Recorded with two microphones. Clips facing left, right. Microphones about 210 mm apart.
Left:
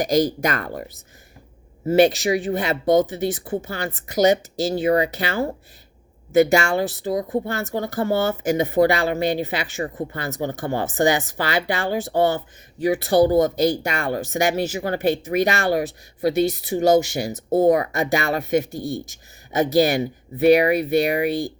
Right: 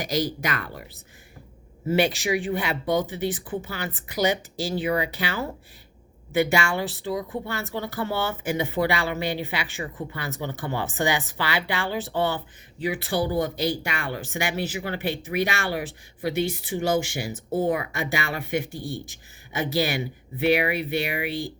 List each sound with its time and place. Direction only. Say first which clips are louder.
0.0 s speech: left 7 dB; 45° left (ahead or behind)